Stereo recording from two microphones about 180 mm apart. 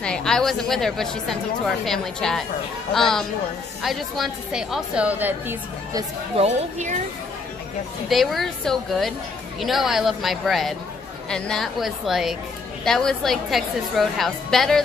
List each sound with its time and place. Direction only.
0.0 s a woman's voice: 5° left (ahead or behind)
6.3 s speech: 40° right (ahead or behind)
8.1 s a woman's voice: centre (ahead or behind)